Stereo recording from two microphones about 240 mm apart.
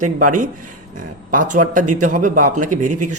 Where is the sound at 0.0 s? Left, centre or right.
Right.